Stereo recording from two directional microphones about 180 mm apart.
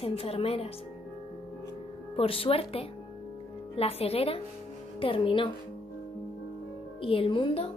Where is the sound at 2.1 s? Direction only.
30° left (ahead or behind).